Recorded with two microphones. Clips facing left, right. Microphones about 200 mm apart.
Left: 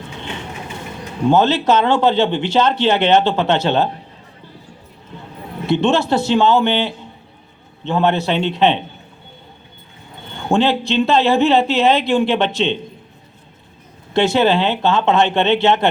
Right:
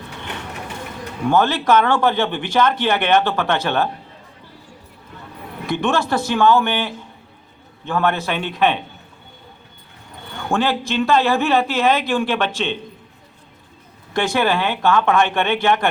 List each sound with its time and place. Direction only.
1.2 s a man's voice: 20° left (ahead or behind)
5.7 s a man's voice: 20° left (ahead or behind)
10.2 s a man's voice: 20° left (ahead or behind)
14.1 s a man's voice: 20° left (ahead or behind)